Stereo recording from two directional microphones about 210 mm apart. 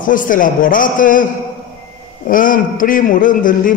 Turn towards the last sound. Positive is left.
turn(degrees=40)  # may be behind; listen again after turning